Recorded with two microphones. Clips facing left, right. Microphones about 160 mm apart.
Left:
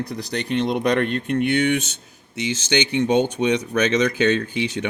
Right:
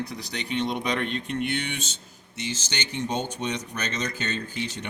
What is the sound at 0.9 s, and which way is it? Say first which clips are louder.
Speech: left 7 dB; 55° left (ahead or behind).